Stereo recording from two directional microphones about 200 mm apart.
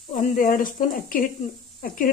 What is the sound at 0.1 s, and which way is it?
Speech, 40° left (ahead or behind).